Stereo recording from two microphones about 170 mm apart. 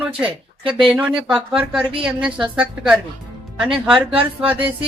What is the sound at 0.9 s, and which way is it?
A woman's voice, 5° right (ahead or behind).